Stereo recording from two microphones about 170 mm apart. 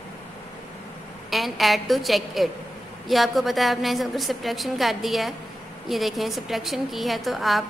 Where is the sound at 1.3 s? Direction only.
Centre (ahead or behind).